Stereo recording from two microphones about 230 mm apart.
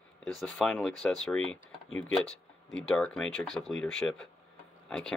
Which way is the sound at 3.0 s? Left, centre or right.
Centre.